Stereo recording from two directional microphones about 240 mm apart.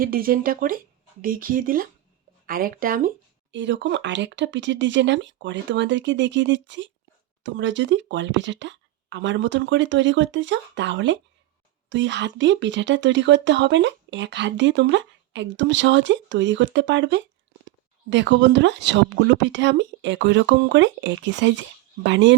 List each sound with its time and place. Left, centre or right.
0.0 s speech: right
3.5 s speech: right